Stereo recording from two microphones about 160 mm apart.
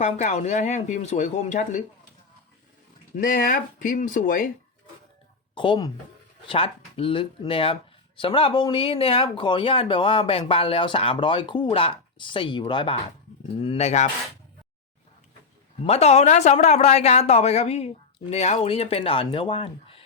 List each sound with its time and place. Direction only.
0.0 s speech: 45° left (ahead or behind)
3.2 s speech: 60° left (ahead or behind)
5.5 s speech: 30° left (ahead or behind)
15.8 s speech: 40° left (ahead or behind)